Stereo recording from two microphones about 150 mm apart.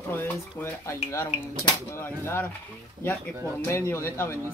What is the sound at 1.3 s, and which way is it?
Speech, 45° left (ahead or behind).